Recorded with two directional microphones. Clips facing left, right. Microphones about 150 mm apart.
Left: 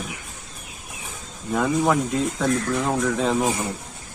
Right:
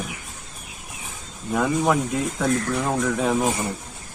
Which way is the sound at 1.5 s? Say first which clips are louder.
Even; centre (ahead or behind).